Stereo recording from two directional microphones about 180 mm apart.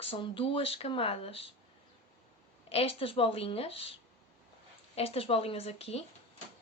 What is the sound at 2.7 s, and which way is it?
Speech, 30° left (ahead or behind).